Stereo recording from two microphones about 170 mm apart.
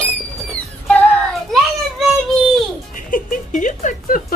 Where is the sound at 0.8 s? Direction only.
5° left (ahead or behind).